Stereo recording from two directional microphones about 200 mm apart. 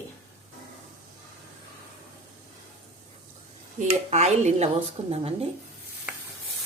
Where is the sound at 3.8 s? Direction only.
35° right (ahead or behind).